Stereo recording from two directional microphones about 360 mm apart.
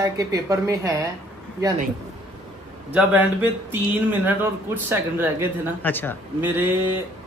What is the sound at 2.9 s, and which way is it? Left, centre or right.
Speech, centre.